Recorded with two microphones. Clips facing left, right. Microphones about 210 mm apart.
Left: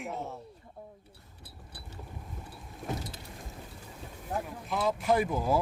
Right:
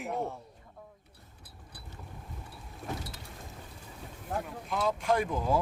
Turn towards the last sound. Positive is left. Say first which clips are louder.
# left 1 dB
turn(degrees=5)  # may be behind; listen again after turning